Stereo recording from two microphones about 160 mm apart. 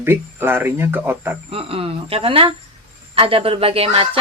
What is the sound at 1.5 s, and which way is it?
Speech, 35° right (ahead or behind).